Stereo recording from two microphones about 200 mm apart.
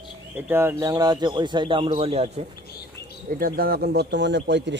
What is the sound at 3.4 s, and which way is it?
A man's voice, 50° right (ahead or behind).